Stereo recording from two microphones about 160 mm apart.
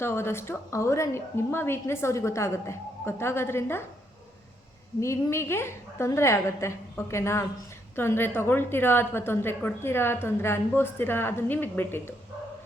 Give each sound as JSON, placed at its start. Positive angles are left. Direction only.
{"t": 0.0, "sound": "a woman's voice", "side_deg": 15}
{"t": 4.9, "sound": "a woman's voice", "side_deg": 15}